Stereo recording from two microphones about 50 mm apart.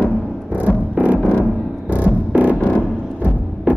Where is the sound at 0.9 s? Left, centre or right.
Right.